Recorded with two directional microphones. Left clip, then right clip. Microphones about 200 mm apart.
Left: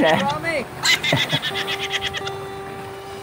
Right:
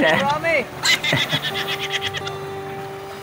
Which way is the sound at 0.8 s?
Centre (ahead or behind).